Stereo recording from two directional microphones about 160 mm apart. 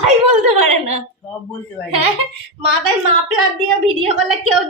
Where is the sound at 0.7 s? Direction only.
45° right (ahead or behind).